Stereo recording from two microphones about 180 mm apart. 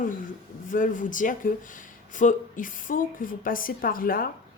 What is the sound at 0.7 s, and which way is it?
Speech, 45° left (ahead or behind).